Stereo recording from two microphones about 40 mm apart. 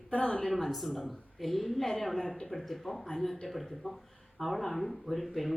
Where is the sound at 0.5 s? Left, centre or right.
Centre.